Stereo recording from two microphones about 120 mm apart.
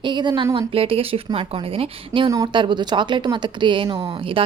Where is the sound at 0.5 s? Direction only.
50° right (ahead or behind).